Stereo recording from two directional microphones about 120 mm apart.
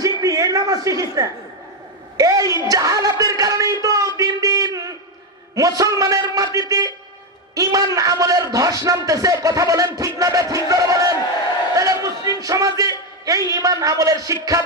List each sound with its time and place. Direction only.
0.0 s a sound: 30° right (ahead or behind)
2.1 s a man's voice: 30° right (ahead or behind)
11.7 s battle cry: 25° right (ahead or behind)
12.4 s a man's voice: 30° right (ahead or behind)